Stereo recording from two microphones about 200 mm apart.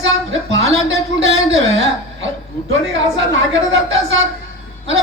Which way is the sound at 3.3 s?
65° right (ahead or behind).